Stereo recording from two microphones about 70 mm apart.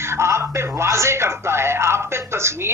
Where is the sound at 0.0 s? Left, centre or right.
Right.